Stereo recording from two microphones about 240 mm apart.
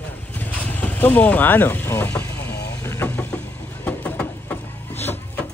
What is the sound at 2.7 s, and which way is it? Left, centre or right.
Vehicle, centre.